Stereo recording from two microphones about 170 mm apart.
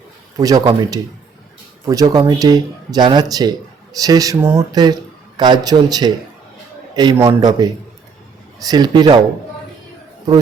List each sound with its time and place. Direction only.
0.3 s a man's voice: 20° right (ahead or behind)